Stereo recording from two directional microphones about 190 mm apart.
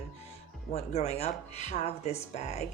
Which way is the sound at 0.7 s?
35° left (ahead or behind).